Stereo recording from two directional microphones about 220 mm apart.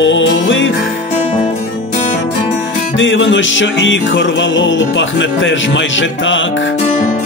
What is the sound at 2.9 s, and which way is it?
Music, 60° left (ahead or behind).